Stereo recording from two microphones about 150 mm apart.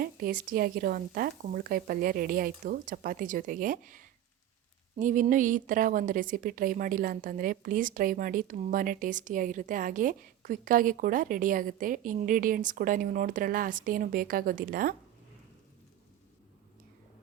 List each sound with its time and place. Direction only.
0.0 s a woman's voice: 70° right (ahead or behind)